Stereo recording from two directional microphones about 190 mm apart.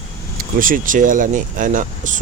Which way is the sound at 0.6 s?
45° right (ahead or behind).